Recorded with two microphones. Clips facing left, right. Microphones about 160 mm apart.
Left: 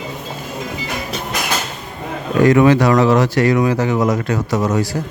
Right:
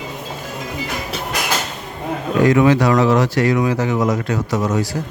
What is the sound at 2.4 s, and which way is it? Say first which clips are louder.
Speech: left 2 dB; 55° left (ahead or behind).